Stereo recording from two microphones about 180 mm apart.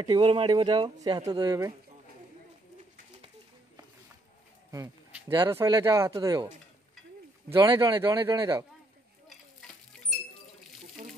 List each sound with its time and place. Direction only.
0.0 s speech: 25° right (ahead or behind)
4.6 s speech: 20° right (ahead or behind)
7.5 s speech: 15° right (ahead or behind)